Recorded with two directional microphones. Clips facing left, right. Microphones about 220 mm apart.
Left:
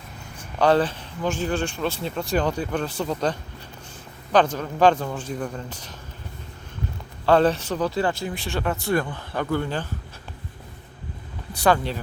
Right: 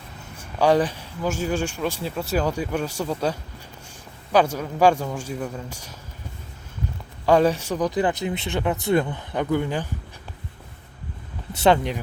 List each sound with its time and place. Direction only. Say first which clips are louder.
0.3 s speech: even; 10° right (ahead or behind)
7.3 s speech: even; 10° right (ahead or behind)
11.5 s speech: right 2 dB; 20° right (ahead or behind)